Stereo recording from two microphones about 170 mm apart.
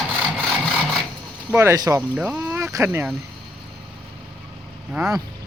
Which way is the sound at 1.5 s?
15° right (ahead or behind).